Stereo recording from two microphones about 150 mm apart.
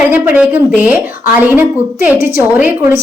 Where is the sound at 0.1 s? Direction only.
10° right (ahead or behind).